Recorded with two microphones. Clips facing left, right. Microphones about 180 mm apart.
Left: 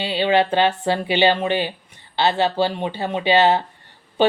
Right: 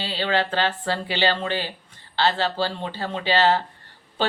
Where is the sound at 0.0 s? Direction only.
20° left (ahead or behind).